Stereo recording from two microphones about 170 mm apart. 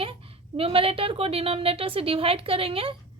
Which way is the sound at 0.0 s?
35° right (ahead or behind).